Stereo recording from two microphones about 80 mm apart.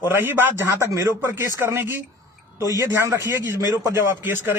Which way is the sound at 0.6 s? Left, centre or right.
Right.